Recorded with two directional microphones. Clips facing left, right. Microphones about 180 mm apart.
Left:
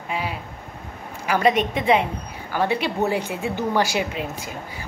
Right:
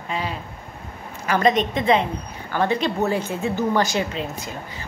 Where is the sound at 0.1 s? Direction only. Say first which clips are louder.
Even; 10° left (ahead or behind).